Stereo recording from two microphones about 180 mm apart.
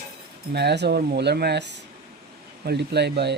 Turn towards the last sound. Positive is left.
turn(degrees=-70)  # may be behind; listen again after turning